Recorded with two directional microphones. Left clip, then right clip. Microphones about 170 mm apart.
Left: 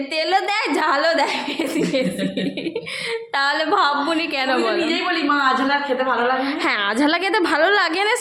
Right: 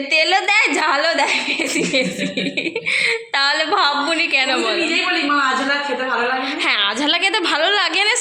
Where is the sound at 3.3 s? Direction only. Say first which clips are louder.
Right 2 dB; 15° left (ahead or behind).